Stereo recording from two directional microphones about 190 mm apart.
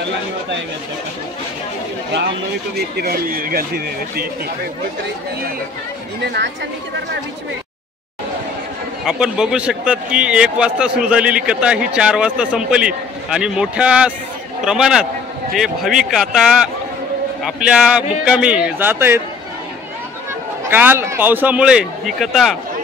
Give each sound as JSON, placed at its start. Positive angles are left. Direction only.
{"t": 2.7, "sound": "speech", "side_deg": -55}
{"t": 9.0, "sound": "a man's voice", "side_deg": -5}
{"t": 20.7, "sound": "a man's voice", "side_deg": -10}